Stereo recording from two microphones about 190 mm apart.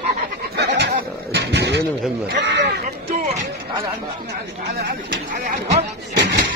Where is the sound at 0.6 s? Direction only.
60° right (ahead or behind).